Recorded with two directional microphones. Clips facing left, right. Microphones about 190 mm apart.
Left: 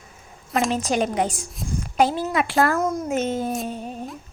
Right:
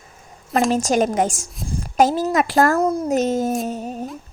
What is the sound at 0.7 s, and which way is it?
A child's voice, 45° right (ahead or behind).